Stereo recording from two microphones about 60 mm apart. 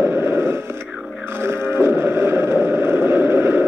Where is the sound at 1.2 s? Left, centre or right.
Right.